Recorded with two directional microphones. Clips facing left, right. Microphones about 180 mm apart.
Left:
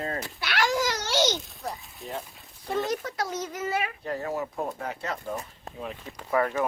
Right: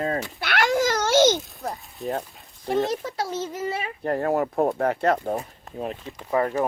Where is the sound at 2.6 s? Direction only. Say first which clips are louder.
Right 4 dB; 25° right (ahead or behind).